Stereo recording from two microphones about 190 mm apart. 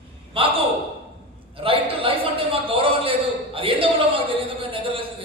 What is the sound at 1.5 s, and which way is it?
A man's voice, 30° right (ahead or behind).